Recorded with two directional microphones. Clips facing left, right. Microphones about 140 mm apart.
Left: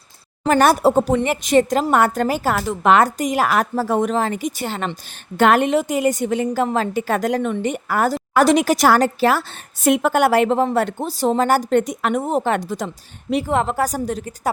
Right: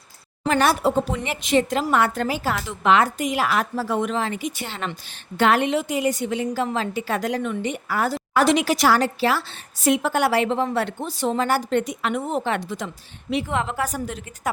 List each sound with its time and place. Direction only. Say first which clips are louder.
0.4 s speech: left 5 dB; 45° left (ahead or behind)